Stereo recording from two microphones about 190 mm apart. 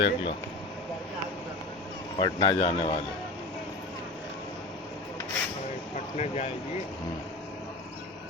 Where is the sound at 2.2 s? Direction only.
20° left (ahead or behind).